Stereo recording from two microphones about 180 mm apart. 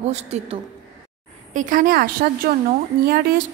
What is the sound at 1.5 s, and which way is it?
A woman's voice, 45° right (ahead or behind).